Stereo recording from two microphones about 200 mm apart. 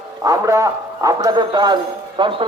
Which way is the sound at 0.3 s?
15° right (ahead or behind).